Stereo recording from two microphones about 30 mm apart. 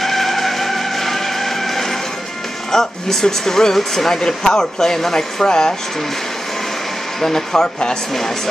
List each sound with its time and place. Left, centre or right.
0.0 s vehicle: centre
2.7 s speech: centre
7.2 s speech: centre